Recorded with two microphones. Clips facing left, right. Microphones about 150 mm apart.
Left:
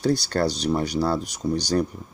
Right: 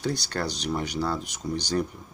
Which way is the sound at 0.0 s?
35° left (ahead or behind).